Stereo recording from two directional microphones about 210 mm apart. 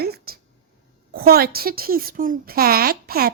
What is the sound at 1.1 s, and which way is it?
A woman's voice, 45° right (ahead or behind).